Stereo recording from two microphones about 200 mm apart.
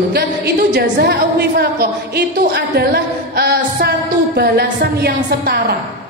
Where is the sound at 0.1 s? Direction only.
50° right (ahead or behind).